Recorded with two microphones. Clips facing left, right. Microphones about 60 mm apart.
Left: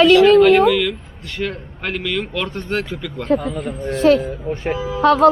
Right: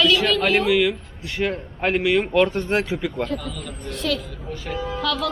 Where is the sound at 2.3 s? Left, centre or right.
Right.